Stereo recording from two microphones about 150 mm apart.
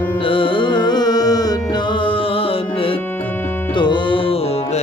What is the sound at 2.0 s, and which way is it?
Music, 35° left (ahead or behind).